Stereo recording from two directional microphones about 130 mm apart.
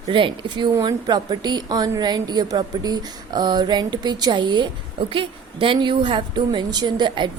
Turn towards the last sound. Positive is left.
turn(degrees=-35)  # may be behind; listen again after turning